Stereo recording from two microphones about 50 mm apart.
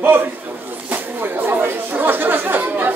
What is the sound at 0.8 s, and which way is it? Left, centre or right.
Chatter, right.